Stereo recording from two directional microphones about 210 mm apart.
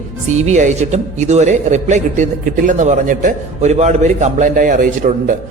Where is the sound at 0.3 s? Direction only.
35° right (ahead or behind).